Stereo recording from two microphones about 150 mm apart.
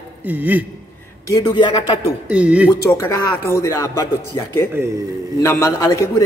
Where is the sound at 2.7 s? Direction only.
20° left (ahead or behind).